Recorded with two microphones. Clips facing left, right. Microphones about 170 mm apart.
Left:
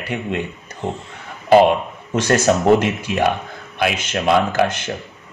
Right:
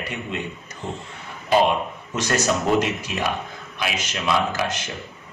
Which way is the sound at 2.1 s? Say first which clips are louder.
Left 7 dB; 55° left (ahead or behind).